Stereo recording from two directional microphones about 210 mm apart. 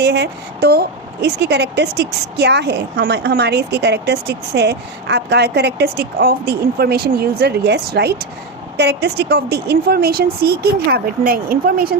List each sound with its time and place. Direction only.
0.0 s a woman's voice: 55° right (ahead or behind)